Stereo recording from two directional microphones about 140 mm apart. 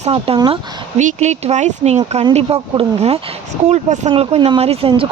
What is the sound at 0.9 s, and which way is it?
Speech, 55° right (ahead or behind).